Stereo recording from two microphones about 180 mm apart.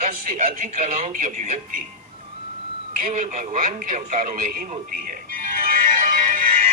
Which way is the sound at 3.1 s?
35° right (ahead or behind).